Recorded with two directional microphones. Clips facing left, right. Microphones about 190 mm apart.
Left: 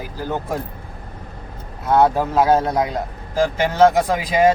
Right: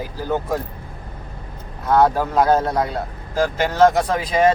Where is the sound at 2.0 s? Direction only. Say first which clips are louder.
Left 1 dB; 10° left (ahead or behind).